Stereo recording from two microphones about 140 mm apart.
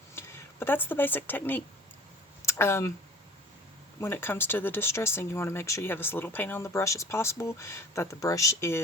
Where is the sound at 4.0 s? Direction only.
15° left (ahead or behind).